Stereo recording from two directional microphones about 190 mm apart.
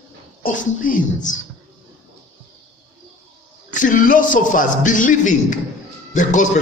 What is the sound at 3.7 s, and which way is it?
A man's voice, 45° left (ahead or behind).